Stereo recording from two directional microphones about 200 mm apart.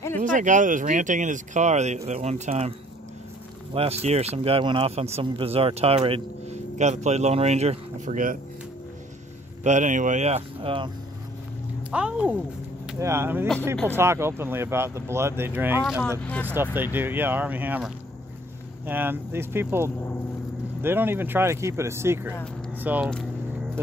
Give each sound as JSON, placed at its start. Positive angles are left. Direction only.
{"t": 0.2, "sound": "speech", "side_deg": -40}
{"t": 3.7, "sound": "speech", "side_deg": -30}
{"t": 9.6, "sound": "speech", "side_deg": -35}
{"t": 11.9, "sound": "speech", "side_deg": -5}
{"t": 15.8, "sound": "speech", "side_deg": 0}
{"t": 16.4, "sound": "speech", "side_deg": -10}